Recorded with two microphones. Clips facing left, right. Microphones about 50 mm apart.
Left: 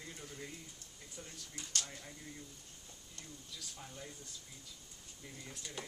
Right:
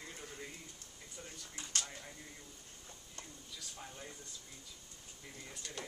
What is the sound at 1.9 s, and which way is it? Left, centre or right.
Speech, centre.